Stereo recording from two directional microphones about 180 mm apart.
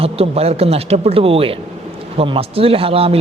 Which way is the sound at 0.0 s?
35° right (ahead or behind).